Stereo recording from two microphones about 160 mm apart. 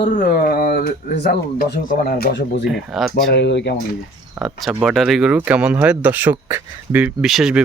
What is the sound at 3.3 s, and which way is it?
Speech, 90° left.